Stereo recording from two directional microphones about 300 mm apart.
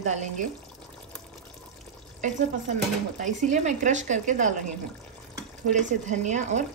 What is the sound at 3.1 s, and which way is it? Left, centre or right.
A woman's voice, right.